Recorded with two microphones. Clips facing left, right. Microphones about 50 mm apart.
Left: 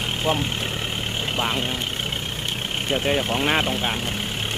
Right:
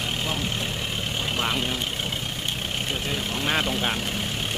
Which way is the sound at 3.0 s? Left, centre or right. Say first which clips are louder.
Left 7 dB; left.